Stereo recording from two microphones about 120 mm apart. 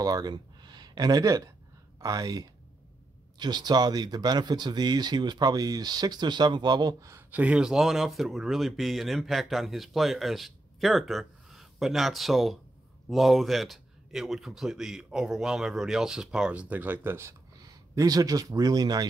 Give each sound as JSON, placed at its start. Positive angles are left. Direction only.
{"t": 0.0, "sound": "speech", "side_deg": -35}
{"t": 7.2, "sound": "speech", "side_deg": -10}